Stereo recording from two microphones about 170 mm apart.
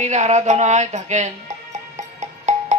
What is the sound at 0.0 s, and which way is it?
Music, 40° right (ahead or behind).